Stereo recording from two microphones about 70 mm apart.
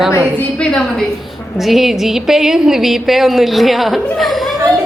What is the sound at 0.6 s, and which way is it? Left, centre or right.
Speech, centre.